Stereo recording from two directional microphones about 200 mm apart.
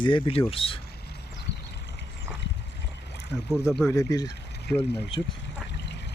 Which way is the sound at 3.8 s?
15° left (ahead or behind).